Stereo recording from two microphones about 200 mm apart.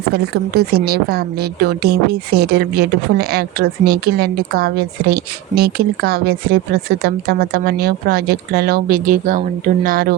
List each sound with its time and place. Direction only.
0.1 s a woman's voice: 50° right (ahead or behind)